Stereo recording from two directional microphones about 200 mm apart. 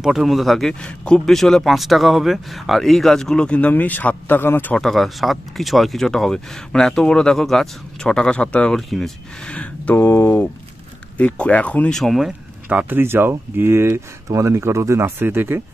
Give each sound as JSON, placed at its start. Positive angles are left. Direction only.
{"t": 0.0, "sound": "speech", "side_deg": 0}